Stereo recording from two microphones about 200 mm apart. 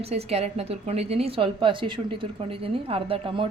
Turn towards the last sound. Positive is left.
turn(degrees=-25)  # may be behind; listen again after turning